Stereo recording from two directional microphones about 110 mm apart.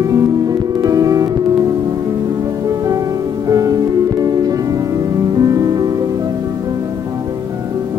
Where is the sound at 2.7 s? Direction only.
35° right (ahead or behind).